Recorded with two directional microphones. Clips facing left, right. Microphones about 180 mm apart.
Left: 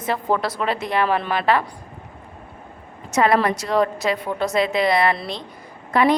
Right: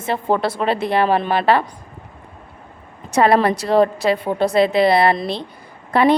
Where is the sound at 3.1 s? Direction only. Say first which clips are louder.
Right 3 dB; 30° right (ahead or behind).